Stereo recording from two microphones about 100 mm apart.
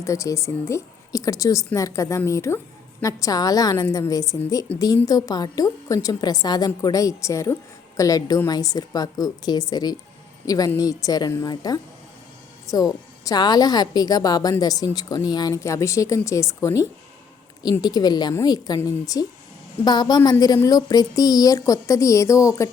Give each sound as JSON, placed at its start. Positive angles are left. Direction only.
{"t": 0.0, "sound": "a woman's voice", "side_deg": 30}
{"t": 4.7, "sound": "speech", "side_deg": 15}
{"t": 5.0, "sound": "a woman's voice", "side_deg": 40}
{"t": 17.6, "sound": "a woman's voice", "side_deg": 45}
{"t": 19.8, "sound": "a woman's voice", "side_deg": 45}